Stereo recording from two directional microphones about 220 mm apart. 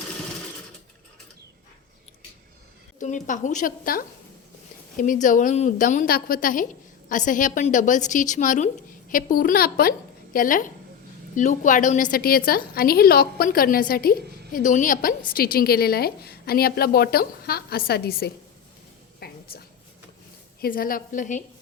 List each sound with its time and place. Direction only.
3.0 s a woman's voice: 35° left (ahead or behind)
19.2 s a sound: 45° left (ahead or behind)
20.6 s a woman's voice: 40° left (ahead or behind)